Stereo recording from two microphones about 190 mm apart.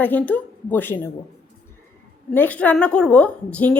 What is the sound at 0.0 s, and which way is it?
A woman's voice, 10° left (ahead or behind).